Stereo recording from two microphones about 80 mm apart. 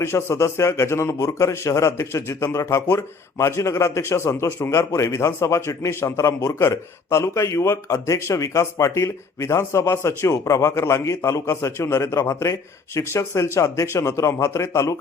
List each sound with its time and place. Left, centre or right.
0.0 s a man's voice: left